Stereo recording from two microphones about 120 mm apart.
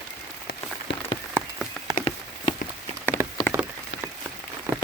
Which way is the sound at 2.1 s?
60° left (ahead or behind).